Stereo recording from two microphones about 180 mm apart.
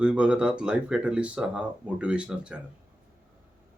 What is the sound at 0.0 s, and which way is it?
Speech, 5° right (ahead or behind).